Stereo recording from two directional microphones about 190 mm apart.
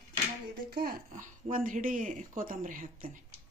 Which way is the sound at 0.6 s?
50° right (ahead or behind).